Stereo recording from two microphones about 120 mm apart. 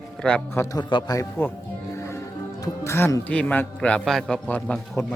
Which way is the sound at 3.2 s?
10° left (ahead or behind).